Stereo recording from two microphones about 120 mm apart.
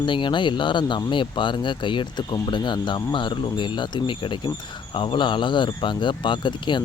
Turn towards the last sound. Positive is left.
turn(degrees=40)  # may be behind; listen again after turning